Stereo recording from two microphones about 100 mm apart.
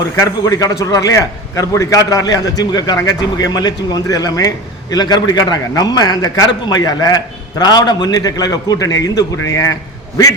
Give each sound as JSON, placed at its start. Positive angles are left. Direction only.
{"t": 0.2, "sound": "a man's voice", "side_deg": 35}